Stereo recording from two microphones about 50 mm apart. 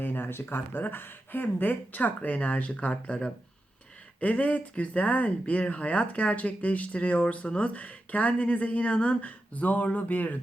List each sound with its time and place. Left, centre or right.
0.0 s speech: left